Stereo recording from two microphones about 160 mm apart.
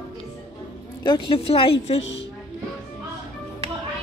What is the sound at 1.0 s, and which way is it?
A woman's voice, 30° left (ahead or behind).